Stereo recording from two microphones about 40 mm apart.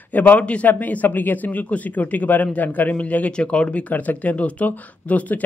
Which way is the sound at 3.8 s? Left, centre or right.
Left.